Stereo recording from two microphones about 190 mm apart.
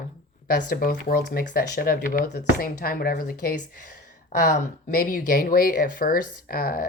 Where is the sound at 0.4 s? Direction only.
50° left (ahead or behind).